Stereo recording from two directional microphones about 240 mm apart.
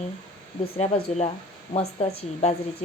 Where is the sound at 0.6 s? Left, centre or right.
Left.